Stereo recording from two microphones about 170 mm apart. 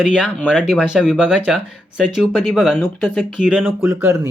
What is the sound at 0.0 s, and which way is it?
Speech, centre (ahead or behind).